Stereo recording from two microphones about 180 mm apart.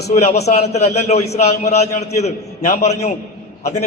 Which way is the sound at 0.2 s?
35° left (ahead or behind).